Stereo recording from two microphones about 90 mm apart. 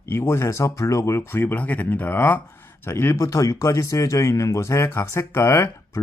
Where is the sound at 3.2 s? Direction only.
40° left (ahead or behind).